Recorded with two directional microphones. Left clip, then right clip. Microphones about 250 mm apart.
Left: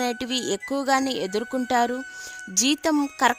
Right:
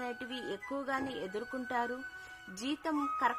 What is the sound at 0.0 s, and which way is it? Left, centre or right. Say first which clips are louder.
Wind chime: left 14 dB; left.